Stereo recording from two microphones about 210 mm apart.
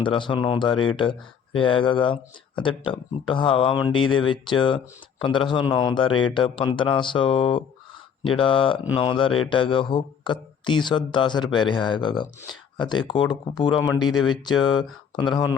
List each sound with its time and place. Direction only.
0.0 s speech: 25° left (ahead or behind)